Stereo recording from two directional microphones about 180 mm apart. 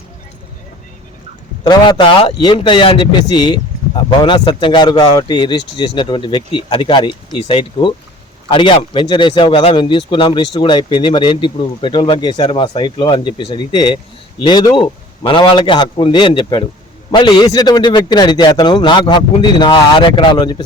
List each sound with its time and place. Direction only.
1.6 s speech: 25° left (ahead or behind)